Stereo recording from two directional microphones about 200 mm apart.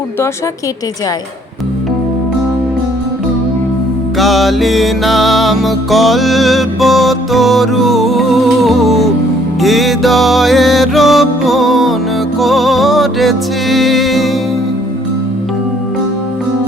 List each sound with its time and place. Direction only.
4.2 s music: centre (ahead or behind)